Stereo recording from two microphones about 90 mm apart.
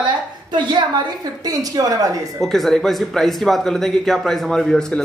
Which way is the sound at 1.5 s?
40° right (ahead or behind).